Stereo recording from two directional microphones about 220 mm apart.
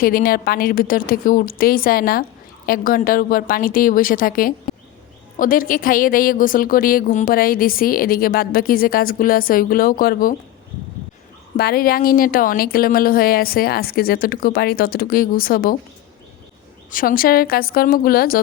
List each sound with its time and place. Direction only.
0.0 s a woman's voice: 40° left (ahead or behind)
11.5 s a woman's voice: 45° left (ahead or behind)
16.9 s a woman's voice: 40° left (ahead or behind)